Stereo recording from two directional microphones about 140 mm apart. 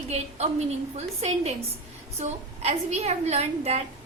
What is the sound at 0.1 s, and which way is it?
A woman's voice, 50° right (ahead or behind).